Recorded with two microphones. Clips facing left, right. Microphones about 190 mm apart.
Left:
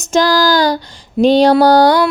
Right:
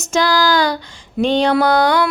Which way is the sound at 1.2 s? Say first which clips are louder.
Left 6 dB; 35° left (ahead or behind).